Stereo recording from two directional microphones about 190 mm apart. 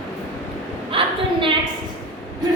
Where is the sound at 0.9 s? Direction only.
30° right (ahead or behind).